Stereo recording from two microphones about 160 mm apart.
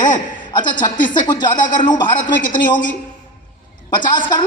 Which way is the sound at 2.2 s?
55° left (ahead or behind).